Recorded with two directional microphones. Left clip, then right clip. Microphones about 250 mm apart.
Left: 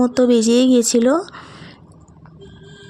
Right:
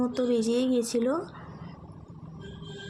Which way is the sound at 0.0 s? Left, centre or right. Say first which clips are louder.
Left 12 dB; left.